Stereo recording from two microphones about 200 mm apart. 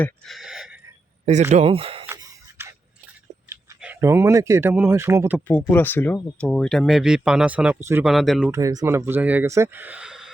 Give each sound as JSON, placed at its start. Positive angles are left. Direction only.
{"t": 0.0, "sound": "a sound", "side_deg": 0}
{"t": 1.2, "sound": "speech", "side_deg": -35}
{"t": 2.0, "sound": "a sound", "side_deg": -15}
{"t": 3.5, "sound": "speech", "side_deg": -10}
{"t": 5.5, "sound": "speech", "side_deg": 10}
{"t": 8.0, "sound": "speech", "side_deg": 0}
{"t": 8.4, "sound": "speech", "side_deg": -15}